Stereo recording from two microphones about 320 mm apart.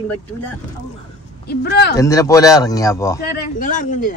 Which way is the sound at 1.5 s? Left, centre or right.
Left.